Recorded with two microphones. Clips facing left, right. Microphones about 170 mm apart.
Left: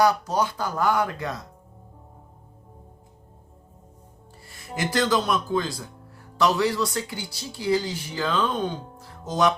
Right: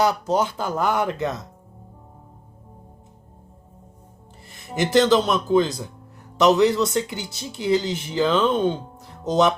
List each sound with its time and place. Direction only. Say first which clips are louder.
0.0 s speech: right 1 dB; 25° right (ahead or behind)
4.4 s speech: right 5 dB; 20° right (ahead or behind)